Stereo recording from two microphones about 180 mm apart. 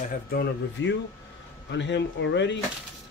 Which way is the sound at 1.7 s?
85° left.